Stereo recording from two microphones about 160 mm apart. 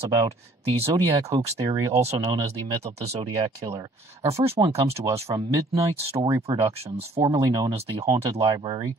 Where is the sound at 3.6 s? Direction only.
25° right (ahead or behind).